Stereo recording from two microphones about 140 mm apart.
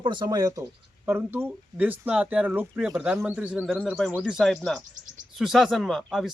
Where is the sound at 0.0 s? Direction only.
35° right (ahead or behind).